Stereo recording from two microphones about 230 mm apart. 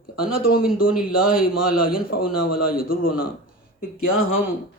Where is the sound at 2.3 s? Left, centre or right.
Left.